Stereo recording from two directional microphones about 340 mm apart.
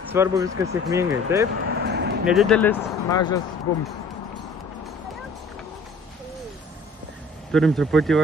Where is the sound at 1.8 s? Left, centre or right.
Right.